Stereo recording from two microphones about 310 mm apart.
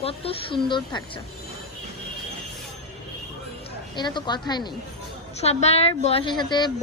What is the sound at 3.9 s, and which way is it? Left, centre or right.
A woman's voice, centre.